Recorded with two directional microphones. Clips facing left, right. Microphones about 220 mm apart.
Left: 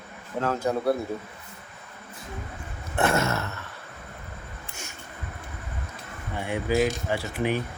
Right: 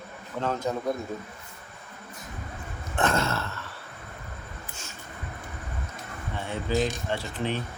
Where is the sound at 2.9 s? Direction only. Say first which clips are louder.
Left 2 dB; 10° left (ahead or behind).